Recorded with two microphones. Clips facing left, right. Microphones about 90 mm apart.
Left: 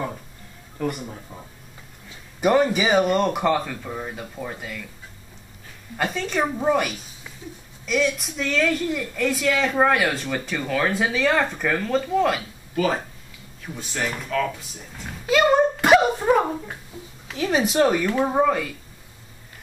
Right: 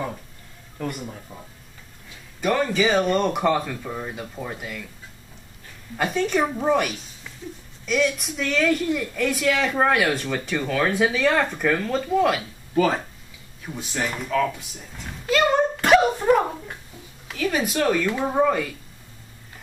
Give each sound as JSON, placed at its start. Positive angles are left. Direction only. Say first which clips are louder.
{"t": 0.7, "sound": "speech", "louder": "left 3 dB", "side_deg": 0}
{"t": 2.4, "sound": "speech", "louder": "left 2 dB", "side_deg": 20}
{"t": 5.9, "sound": "a woman's voice", "louder": "right 2 dB", "side_deg": -5}
{"t": 13.7, "sound": "speech", "louder": "right 1 dB", "side_deg": -5}
{"t": 15.2, "sound": "a sound", "louder": "left 2 dB", "side_deg": 5}
{"t": 17.4, "sound": "a woman's voice", "louder": "left 3 dB", "side_deg": 20}
{"t": 18.4, "sound": "speech", "louder": "right 2 dB", "side_deg": 0}